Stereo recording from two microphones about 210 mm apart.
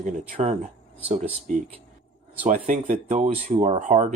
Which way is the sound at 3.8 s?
35° right (ahead or behind).